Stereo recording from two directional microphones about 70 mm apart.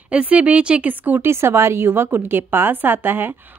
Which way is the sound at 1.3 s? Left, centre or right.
Right.